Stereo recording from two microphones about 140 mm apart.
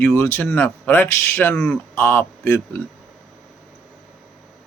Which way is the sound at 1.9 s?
15° left (ahead or behind).